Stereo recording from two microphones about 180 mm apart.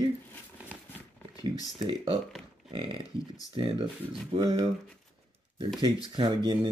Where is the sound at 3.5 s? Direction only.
25° right (ahead or behind).